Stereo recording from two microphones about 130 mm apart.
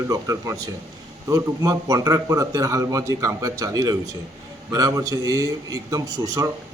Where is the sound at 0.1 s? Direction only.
25° right (ahead or behind).